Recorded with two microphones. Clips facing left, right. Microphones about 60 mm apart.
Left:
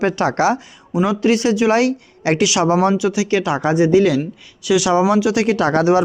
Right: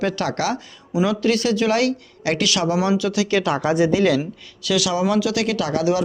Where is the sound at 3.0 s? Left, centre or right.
Left.